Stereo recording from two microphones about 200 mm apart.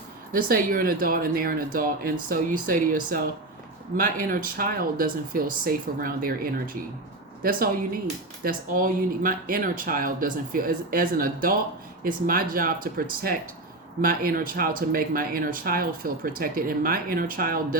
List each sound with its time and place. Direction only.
0.3 s speech: 45° right (ahead or behind)
8.4 s speech: 45° right (ahead or behind)